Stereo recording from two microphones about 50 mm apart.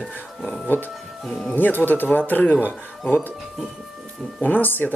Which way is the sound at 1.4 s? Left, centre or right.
Left.